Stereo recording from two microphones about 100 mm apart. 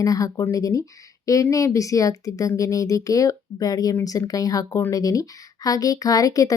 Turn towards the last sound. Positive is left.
turn(degrees=35)  # may be behind; listen again after turning